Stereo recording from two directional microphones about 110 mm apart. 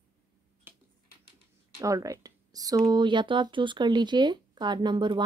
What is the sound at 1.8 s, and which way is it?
Speech, 30° right (ahead or behind).